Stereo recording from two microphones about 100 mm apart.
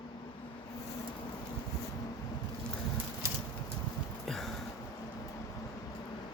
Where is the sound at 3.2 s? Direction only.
35° right (ahead or behind).